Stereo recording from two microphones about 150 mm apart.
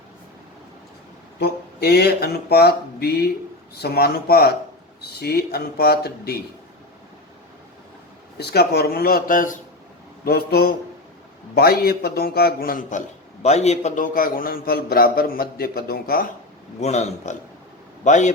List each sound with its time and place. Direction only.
1.4 s speech: 90° left
8.4 s speech: 90° left; by 9.6 s 65° left (ahead or behind)
10.2 s speech: 90° left; by 13.0 s 70° left (ahead or behind)
13.4 s a man's voice: 45° left (ahead or behind); by 16.2 s 85° left
16.8 s a man's voice: 50° left (ahead or behind)